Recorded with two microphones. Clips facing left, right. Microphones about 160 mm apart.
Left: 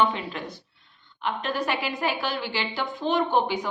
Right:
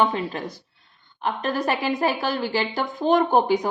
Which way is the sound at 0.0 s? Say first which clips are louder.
Right 2 dB; 40° right (ahead or behind).